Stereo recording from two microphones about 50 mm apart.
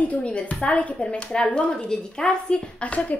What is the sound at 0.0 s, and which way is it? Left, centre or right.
A woman's voice, left.